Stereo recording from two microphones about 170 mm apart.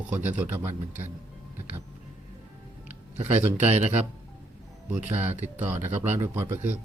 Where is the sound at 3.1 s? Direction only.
40° right (ahead or behind).